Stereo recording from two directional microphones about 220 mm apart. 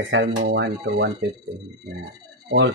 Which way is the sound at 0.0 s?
60° right (ahead or behind).